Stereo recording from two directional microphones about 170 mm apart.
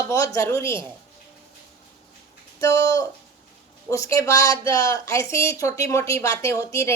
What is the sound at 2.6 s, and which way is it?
A woman's voice, 20° left (ahead or behind).